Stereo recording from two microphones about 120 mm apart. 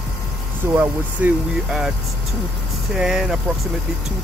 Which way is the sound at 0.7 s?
5° right (ahead or behind).